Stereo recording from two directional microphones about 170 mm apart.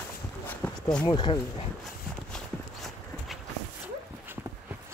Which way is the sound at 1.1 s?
25° left (ahead or behind).